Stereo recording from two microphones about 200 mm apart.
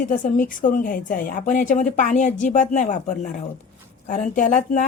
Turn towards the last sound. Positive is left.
turn(degrees=40)  # may be behind; listen again after turning